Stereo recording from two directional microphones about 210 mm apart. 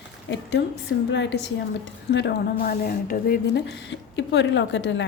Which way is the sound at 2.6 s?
45° left (ahead or behind).